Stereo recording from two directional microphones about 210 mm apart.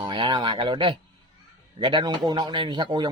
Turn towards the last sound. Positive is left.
turn(degrees=-20)  # may be behind; listen again after turning